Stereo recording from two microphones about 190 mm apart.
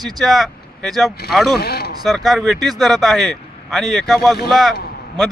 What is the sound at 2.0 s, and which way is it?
Speech, centre (ahead or behind).